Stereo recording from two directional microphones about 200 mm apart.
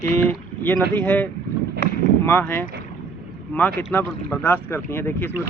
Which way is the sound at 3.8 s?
10° left (ahead or behind).